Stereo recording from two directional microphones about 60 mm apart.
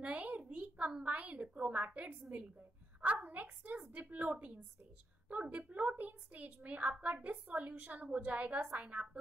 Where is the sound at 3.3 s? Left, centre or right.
Right.